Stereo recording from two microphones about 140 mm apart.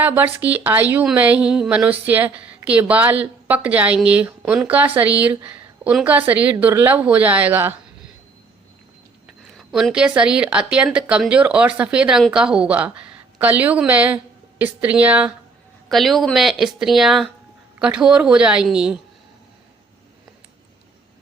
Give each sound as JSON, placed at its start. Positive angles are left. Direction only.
{"t": 0.0, "sound": "a woman's voice", "side_deg": -15}
{"t": 9.2, "sound": "a woman's voice", "side_deg": 0}